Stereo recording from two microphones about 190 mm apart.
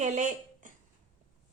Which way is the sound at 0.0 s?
40° right (ahead or behind).